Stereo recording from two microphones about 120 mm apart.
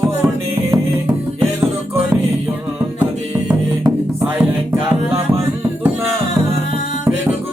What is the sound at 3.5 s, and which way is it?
Music, 15° right (ahead or behind).